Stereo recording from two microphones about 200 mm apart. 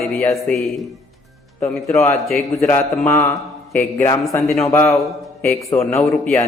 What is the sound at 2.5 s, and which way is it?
A man's voice, 10° left (ahead or behind).